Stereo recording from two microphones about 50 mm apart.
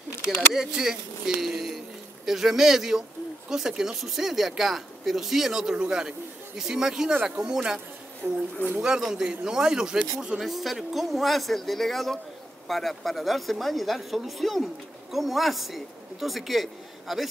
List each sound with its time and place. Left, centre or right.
0.6 s speech: centre
8.2 s a woman's voice: right
8.8 s speech: centre
10.4 s speech: centre